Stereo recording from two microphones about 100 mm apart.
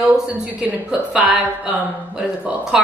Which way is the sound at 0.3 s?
15° right (ahead or behind).